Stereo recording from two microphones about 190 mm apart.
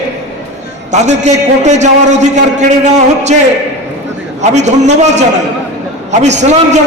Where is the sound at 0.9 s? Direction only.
35° right (ahead or behind).